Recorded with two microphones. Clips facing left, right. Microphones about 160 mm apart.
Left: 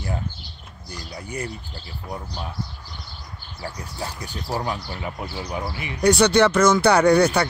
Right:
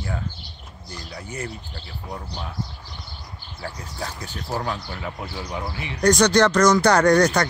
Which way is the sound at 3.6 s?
15° left (ahead or behind).